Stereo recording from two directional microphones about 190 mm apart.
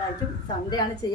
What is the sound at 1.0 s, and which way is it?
Speech, 20° left (ahead or behind).